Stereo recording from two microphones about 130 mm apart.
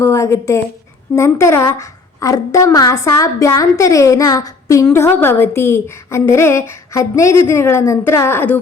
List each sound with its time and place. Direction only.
0.0 s a woman's voice: 20° left (ahead or behind)